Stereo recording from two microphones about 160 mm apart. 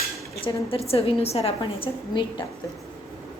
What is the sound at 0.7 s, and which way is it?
A woman's voice, 40° left (ahead or behind).